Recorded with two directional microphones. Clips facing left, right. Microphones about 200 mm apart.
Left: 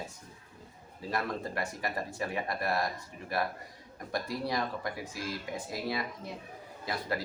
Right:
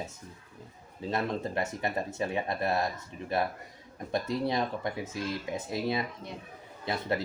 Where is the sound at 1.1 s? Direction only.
25° right (ahead or behind).